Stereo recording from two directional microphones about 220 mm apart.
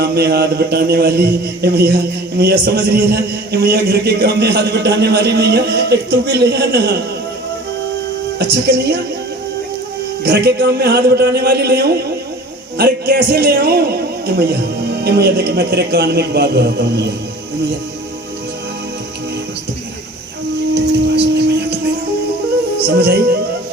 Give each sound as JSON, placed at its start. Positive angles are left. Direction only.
{"t": 0.0, "sound": "a man's voice", "side_deg": -45}
{"t": 8.4, "sound": "a man's voice", "side_deg": -50}
{"t": 10.2, "sound": "a man's voice", "side_deg": -50}
{"t": 20.7, "sound": "a sound", "side_deg": -50}
{"t": 23.0, "sound": "a man's voice", "side_deg": -45}